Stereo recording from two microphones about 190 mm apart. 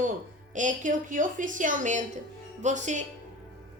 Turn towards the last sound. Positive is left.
turn(degrees=-40)  # may be behind; listen again after turning